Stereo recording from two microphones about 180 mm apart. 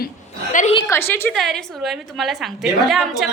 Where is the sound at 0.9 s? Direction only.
15° left (ahead or behind).